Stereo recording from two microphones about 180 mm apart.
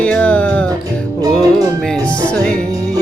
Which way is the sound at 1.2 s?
20° right (ahead or behind).